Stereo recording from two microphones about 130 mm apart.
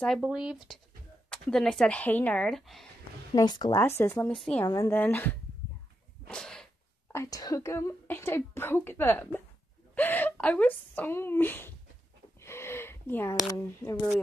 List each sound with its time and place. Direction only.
0.2 s speech: 5° right (ahead or behind); by 2.4 s 15° left (ahead or behind)
2.4 s speech: centre (ahead or behind)
3.3 s speech: 30° left (ahead or behind)
3.7 s speech: 20° left (ahead or behind)
4.6 s speech: 25° left (ahead or behind)
4.9 s speech: 15° left (ahead or behind)
6.2 s sneeze: 5° left (ahead or behind)
7.1 s a woman's voice: 25° left (ahead or behind)
12.4 s a sound: 20° left (ahead or behind)